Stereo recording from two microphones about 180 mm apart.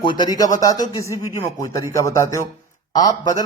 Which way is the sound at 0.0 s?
25° left (ahead or behind).